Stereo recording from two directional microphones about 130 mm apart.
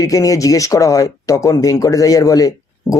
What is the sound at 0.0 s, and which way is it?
Speech, 25° left (ahead or behind).